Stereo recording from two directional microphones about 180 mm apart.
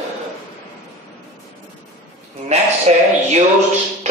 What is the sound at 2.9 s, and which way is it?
Speech, 40° right (ahead or behind).